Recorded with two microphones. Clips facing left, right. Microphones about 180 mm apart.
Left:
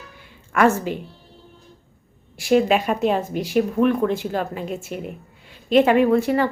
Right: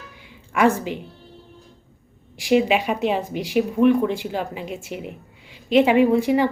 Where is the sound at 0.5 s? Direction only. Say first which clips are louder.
Left 1 dB; 15° right (ahead or behind).